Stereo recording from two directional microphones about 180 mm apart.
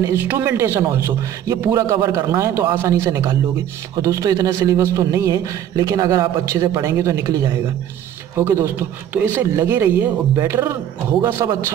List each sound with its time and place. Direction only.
0.0 s a man's voice: 15° right (ahead or behind)